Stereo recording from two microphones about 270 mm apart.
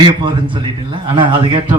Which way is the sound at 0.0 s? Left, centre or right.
Centre.